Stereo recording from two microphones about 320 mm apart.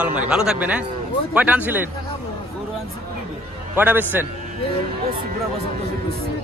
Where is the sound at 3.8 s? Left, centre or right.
Centre.